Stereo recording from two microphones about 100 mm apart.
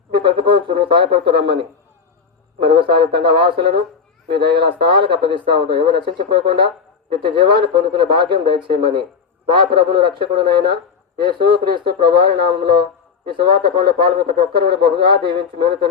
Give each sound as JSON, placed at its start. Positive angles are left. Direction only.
{"t": 0.1, "sound": "a man's voice", "side_deg": -55}